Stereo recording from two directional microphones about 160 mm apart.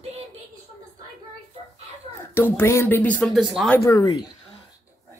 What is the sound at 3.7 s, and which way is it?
Speech, 20° left (ahead or behind).